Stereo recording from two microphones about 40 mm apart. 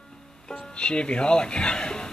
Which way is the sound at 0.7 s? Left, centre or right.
Left.